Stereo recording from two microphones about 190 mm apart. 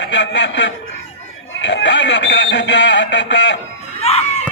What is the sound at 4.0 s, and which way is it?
Music, 35° left (ahead or behind).